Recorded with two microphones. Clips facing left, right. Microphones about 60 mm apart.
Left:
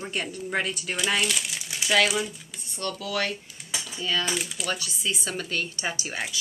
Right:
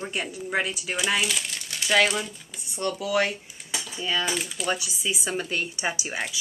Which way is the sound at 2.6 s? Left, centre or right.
Centre.